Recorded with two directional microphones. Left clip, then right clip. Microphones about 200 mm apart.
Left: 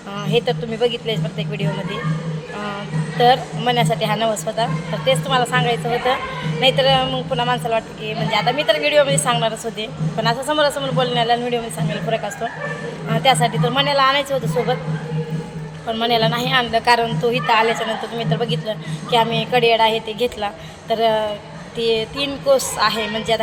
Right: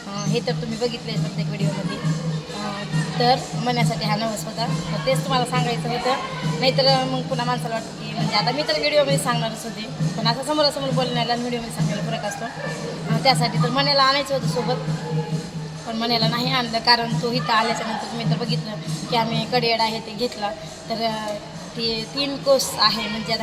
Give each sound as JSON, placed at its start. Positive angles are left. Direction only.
{"t": 0.3, "sound": "a woman's voice", "side_deg": 15}
{"t": 3.2, "sound": "a woman's voice", "side_deg": 15}
{"t": 13.2, "sound": "a woman's voice", "side_deg": 15}
{"t": 16.0, "sound": "a woman's voice", "side_deg": 15}